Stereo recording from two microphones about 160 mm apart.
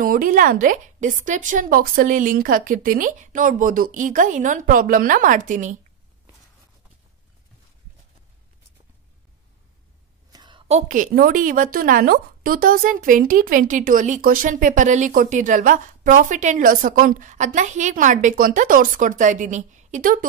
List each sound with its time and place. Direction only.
0.0 s a woman's voice: 60° right (ahead or behind)
10.3 s a sound: 30° right (ahead or behind)
10.7 s a woman's voice: 50° right (ahead or behind)